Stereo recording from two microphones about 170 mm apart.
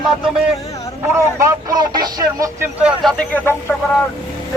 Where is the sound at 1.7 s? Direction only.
25° right (ahead or behind).